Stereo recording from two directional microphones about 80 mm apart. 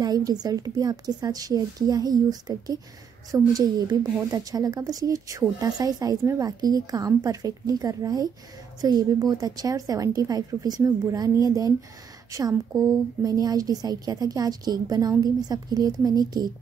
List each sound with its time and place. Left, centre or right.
0.0 s a woman's voice: right
3.3 s a woman's voice: right
4.3 s a woman's voice: right